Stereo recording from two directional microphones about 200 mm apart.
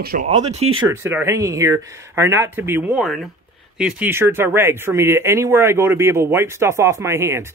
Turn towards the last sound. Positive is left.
turn(degrees=-15)  # may be behind; listen again after turning